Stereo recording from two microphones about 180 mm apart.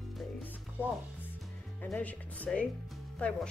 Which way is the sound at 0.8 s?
10° left (ahead or behind).